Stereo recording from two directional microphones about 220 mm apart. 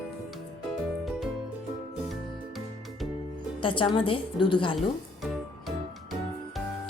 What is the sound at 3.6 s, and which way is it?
A woman's voice, 20° left (ahead or behind).